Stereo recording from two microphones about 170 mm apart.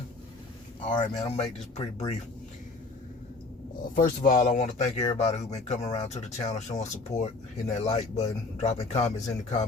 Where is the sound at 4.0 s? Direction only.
50° left (ahead or behind).